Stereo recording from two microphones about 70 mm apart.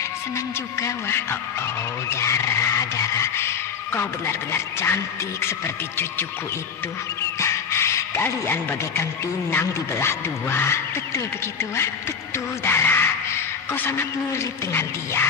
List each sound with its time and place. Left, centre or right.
0.7 s music: left
7.2 s music: left
12.6 s speech: left